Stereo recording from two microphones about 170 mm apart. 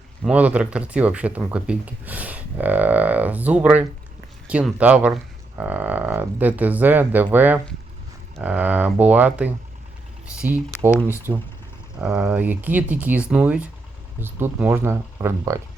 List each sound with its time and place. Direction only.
0.2 s speech: 10° right (ahead or behind)
11.3 s speech: 20° right (ahead or behind)
11.9 s speech: 5° right (ahead or behind)